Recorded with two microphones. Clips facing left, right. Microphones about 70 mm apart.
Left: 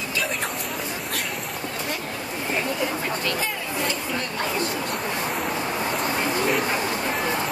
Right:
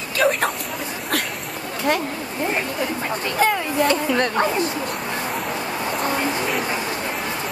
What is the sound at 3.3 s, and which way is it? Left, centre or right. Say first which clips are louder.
Speech: right 8 dB; right.